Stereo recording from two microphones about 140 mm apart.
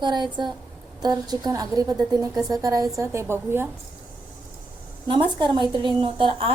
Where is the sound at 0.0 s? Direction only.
35° right (ahead or behind); by 3.7 s 15° right (ahead or behind).